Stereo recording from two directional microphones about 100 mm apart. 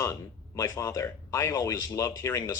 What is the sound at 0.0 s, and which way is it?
Speech, 30° left (ahead or behind).